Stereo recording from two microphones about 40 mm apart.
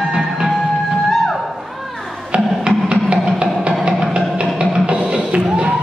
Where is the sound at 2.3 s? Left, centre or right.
Right.